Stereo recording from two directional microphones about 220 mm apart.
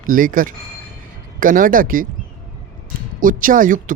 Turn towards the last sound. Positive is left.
turn(degrees=-35)  # may be behind; listen again after turning